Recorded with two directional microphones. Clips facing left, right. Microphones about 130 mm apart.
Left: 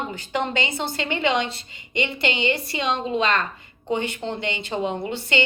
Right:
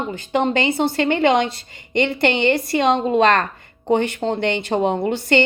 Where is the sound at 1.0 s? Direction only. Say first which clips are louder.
Right 6 dB; 50° right (ahead or behind).